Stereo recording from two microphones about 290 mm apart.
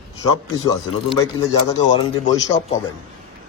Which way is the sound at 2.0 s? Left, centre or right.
Centre.